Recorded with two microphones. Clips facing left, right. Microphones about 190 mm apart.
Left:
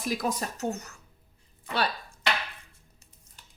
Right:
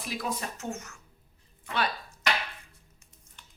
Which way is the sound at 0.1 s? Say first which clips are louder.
Left 4 dB; 45° left (ahead or behind).